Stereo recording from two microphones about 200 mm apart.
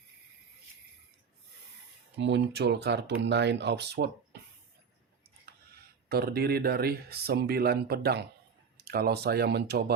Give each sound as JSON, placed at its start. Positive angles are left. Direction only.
{"t": 2.1, "sound": "speech", "side_deg": -65}
{"t": 6.1, "sound": "speech", "side_deg": -50}